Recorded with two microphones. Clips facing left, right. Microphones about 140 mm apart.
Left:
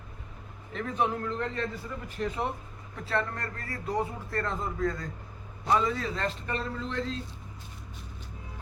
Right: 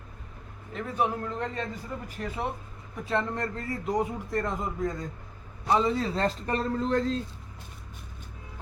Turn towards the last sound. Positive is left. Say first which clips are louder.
# right 7 dB
turn(degrees=-40)  # may be behind; listen again after turning